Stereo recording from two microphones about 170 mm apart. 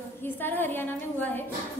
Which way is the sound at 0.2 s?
10° left (ahead or behind).